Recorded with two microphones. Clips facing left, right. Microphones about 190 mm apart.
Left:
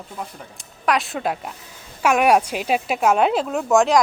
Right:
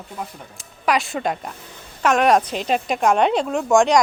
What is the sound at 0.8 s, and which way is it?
Speech, centre (ahead or behind).